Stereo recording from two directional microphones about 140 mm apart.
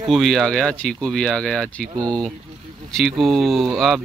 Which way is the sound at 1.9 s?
30° right (ahead or behind).